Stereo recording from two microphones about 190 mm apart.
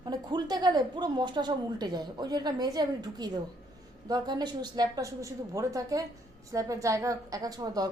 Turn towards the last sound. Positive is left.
turn(degrees=-20)  # may be behind; listen again after turning